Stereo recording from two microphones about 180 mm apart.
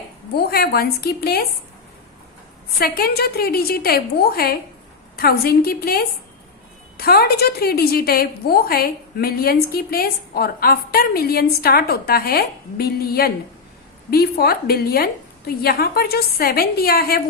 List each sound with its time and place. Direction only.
0.3 s a woman's voice: 60° left (ahead or behind)
2.7 s a woman's voice: 55° left (ahead or behind)